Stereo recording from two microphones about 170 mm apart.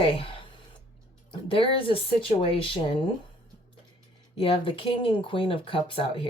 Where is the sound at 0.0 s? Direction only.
30° left (ahead or behind).